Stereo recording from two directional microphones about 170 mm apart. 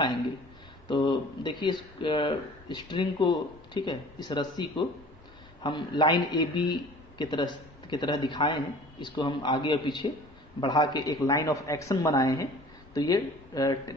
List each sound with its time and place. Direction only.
0.8 s speech: 25° left (ahead or behind)